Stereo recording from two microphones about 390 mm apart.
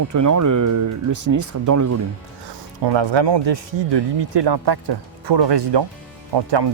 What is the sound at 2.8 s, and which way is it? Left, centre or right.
Speech, right.